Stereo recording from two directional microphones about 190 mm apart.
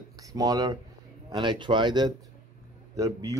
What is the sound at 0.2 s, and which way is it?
Speech, 20° right (ahead or behind).